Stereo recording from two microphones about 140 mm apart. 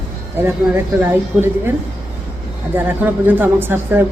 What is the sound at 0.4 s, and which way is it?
Speech, 15° right (ahead or behind).